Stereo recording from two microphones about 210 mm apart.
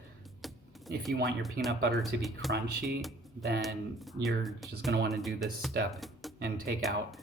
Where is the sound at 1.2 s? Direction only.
Centre (ahead or behind).